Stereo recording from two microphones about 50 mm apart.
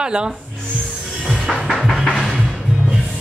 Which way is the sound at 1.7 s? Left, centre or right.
Centre.